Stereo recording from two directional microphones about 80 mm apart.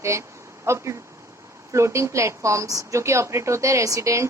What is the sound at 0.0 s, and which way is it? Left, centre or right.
A woman's voice, right.